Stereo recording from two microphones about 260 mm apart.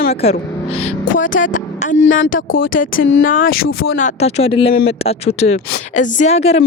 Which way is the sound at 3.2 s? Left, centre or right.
Left.